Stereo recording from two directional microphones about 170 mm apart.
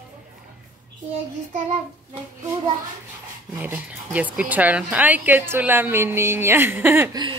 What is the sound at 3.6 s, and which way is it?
A woman's voice, 10° right (ahead or behind).